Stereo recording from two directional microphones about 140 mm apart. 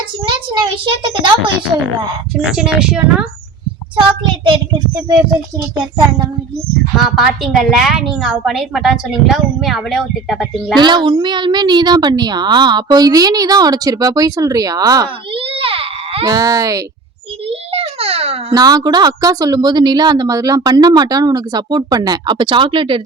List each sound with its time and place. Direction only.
0.3 s a child's voice: 35° right (ahead or behind)
2.4 s a woman's voice: 5° right (ahead or behind)
4.4 s a woman's voice: 35° right (ahead or behind)
7.0 s a woman's voice: centre (ahead or behind)
10.8 s a woman's voice: 35° right (ahead or behind)
15.5 s baby cry: 40° right (ahead or behind)
16.2 s speech: 25° right (ahead or behind)
17.7 s babbling: 45° right (ahead or behind)
18.5 s speech: 25° right (ahead or behind)